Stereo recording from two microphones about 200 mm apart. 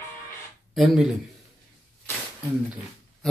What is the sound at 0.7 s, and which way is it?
Speech, centre (ahead or behind).